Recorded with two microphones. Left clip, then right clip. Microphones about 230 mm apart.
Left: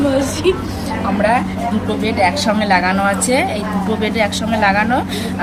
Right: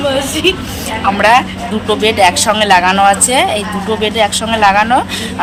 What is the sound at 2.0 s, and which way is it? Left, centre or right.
Speech, right.